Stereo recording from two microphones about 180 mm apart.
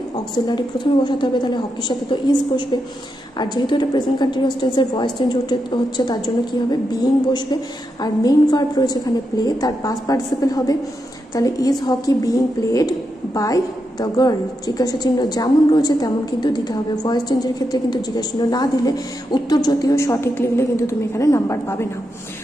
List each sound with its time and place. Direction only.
0.3 s a woman's voice: 25° left (ahead or behind)